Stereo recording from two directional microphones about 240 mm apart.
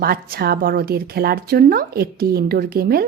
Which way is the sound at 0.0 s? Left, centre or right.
Right.